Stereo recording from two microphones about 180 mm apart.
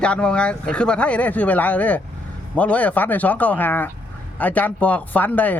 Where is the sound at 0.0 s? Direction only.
5° left (ahead or behind).